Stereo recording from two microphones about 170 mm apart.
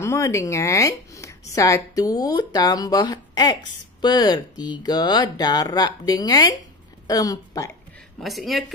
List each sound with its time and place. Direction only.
0.0 s a woman's voice: 15° left (ahead or behind)
8.2 s speech: centre (ahead or behind)